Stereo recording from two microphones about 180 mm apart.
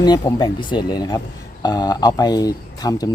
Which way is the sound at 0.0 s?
25° left (ahead or behind).